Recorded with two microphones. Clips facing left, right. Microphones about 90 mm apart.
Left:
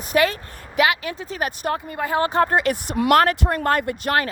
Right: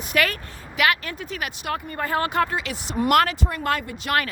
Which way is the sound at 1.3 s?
35° left (ahead or behind).